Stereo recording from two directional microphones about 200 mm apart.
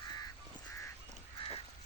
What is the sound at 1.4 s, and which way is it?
Crow, 25° left (ahead or behind).